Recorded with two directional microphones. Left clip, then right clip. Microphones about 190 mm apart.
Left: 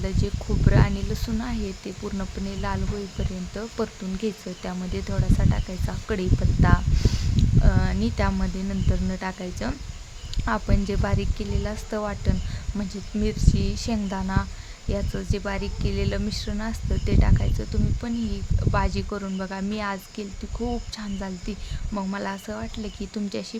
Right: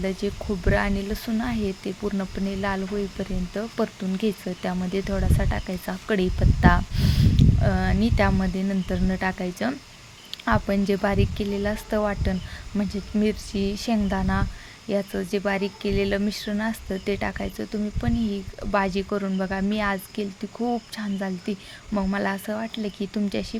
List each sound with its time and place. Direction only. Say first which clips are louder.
0.0 s speech: right 4 dB; 15° right (ahead or behind)
7.0 s speech: right 4 dB; 10° right (ahead or behind)